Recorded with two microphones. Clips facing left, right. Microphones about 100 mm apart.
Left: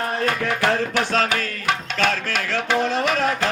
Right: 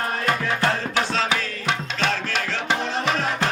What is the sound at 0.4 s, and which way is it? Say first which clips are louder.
Music: left 2 dB; 60° left (ahead or behind).